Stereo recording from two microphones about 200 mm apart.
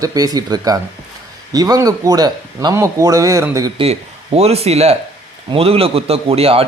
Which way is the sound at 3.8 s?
30° right (ahead or behind).